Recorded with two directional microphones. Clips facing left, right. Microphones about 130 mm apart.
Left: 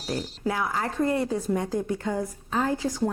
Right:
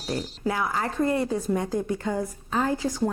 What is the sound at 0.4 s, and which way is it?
Speech, 25° right (ahead or behind).